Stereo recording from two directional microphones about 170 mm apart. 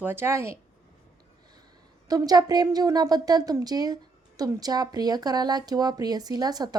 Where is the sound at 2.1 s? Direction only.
20° right (ahead or behind).